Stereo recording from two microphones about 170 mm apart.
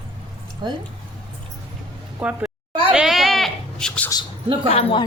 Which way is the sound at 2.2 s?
10° right (ahead or behind).